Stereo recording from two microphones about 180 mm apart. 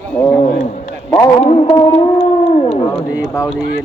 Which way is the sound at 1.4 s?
35° left (ahead or behind).